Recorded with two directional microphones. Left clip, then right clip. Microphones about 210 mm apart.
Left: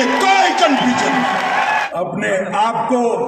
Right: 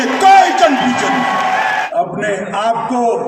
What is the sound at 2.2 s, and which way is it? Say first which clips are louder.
Speech: left 1 dB; 35° left (ahead or behind).